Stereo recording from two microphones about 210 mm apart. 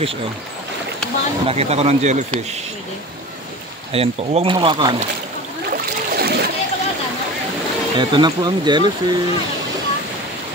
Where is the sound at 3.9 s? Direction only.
30° right (ahead or behind).